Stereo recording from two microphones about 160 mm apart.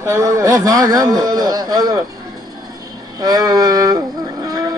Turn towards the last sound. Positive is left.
turn(degrees=-25)  # may be behind; listen again after turning